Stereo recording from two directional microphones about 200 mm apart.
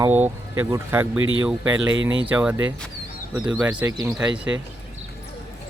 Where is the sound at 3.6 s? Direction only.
5° right (ahead or behind).